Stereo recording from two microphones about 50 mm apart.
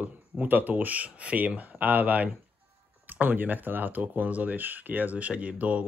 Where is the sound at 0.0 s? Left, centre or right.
Right.